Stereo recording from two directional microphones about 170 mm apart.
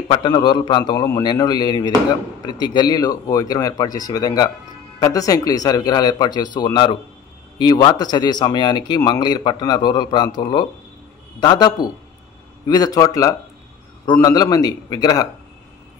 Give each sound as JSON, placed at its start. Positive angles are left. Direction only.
{"t": 0.1, "sound": "speech", "side_deg": 25}